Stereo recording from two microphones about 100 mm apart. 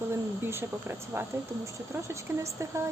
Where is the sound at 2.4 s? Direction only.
30° right (ahead or behind).